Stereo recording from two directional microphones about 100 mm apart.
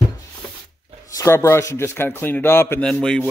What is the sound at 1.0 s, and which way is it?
A man's voice, 30° left (ahead or behind).